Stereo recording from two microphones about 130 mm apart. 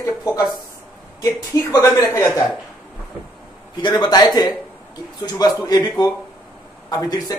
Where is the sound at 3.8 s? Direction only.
35° left (ahead or behind).